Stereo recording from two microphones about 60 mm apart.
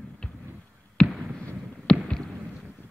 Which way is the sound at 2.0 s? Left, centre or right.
Centre.